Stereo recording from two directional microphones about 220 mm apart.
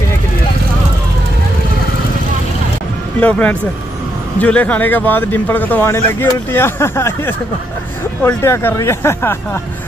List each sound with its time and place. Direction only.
3.2 s speech: 5° left (ahead or behind)